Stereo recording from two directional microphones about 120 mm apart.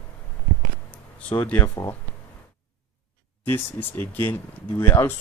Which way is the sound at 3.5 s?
15° left (ahead or behind).